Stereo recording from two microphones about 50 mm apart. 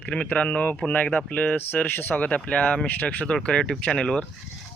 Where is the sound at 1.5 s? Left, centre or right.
Left.